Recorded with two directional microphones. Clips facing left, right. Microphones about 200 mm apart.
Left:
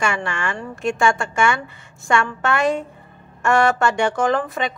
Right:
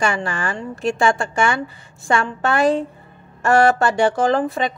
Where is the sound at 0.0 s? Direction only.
35° right (ahead or behind).